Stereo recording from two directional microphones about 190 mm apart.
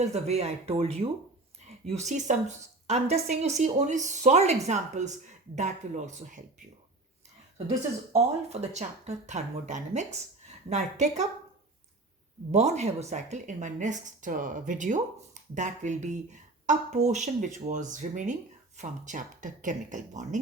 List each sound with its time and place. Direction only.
0.0 s a woman's voice: 35° right (ahead or behind)
8.1 s a woman's voice: 35° right (ahead or behind)
12.5 s a woman's voice: 35° right (ahead or behind)